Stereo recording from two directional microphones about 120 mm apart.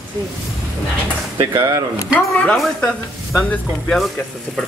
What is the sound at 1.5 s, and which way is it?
Speech, 25° right (ahead or behind).